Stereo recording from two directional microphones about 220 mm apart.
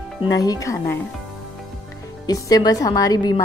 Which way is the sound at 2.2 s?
15° left (ahead or behind).